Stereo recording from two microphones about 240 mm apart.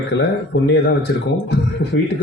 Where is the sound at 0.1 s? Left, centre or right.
Left.